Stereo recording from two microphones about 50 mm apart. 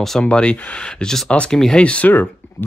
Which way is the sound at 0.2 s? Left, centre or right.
Left.